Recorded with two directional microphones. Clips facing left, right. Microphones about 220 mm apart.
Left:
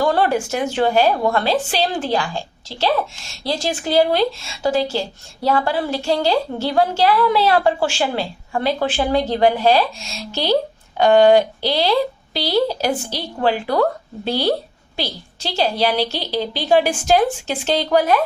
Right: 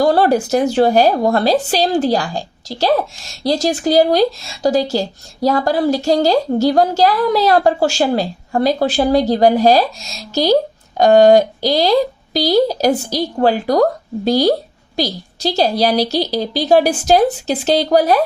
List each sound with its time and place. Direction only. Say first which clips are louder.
0.0 s speech: right 5 dB; 40° right (ahead or behind)